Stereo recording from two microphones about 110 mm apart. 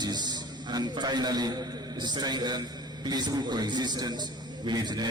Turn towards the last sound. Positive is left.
turn(degrees=-40)  # may be behind; listen again after turning